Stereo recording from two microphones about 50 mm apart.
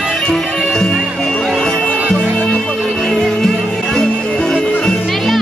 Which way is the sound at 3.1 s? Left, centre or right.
Centre.